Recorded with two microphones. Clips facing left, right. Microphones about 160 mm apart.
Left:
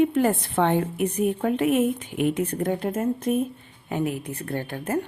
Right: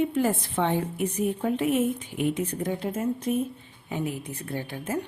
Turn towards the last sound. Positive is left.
turn(degrees=55)  # may be behind; listen again after turning